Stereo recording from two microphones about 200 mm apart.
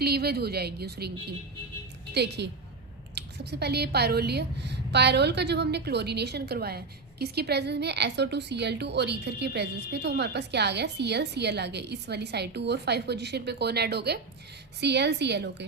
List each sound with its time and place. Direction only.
0.0 s a woman's voice: 55° right (ahead or behind)
2.1 s a woman's voice: 55° right (ahead or behind)